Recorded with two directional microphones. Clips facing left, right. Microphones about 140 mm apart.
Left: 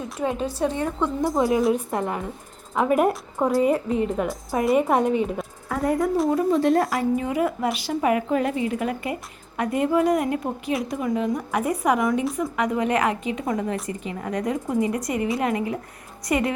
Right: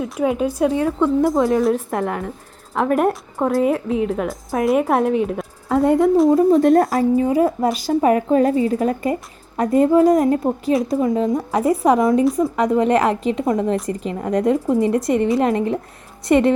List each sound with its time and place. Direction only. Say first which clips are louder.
0.0 s a woman's voice: right 6 dB; 10° right (ahead or behind)
5.6 s speech: right 8 dB; 25° right (ahead or behind)
6.5 s speech: right 6 dB; 45° right (ahead or behind)
7.2 s a woman's voice: right 7 dB; 35° right (ahead or behind)
13.9 s speech: right 6 dB; 50° right (ahead or behind)
14.3 s a woman's voice: right 9 dB; 30° right (ahead or behind)